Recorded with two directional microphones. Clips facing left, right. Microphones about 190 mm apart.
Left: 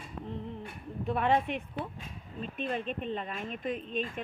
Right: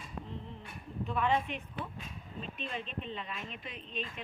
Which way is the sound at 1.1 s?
55° left (ahead or behind).